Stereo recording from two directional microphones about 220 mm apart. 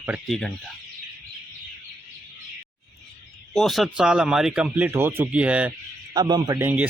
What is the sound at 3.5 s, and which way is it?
Speech, centre (ahead or behind).